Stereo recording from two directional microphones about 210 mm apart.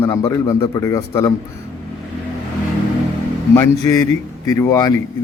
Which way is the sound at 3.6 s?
15° left (ahead or behind).